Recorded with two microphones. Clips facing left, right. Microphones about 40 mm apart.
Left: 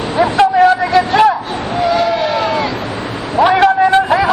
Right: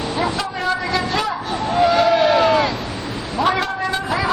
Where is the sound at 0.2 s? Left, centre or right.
Left.